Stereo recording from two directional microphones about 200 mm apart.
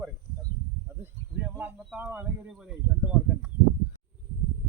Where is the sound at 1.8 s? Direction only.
5° right (ahead or behind).